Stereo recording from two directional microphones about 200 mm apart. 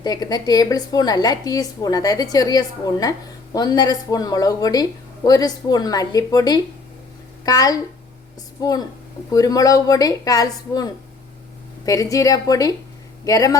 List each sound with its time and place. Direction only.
0.0 s a woman's voice: 20° left (ahead or behind)